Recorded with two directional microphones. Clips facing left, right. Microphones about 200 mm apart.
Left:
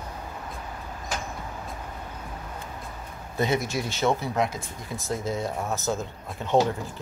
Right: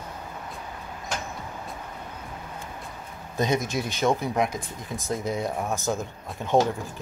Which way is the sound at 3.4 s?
20° right (ahead or behind).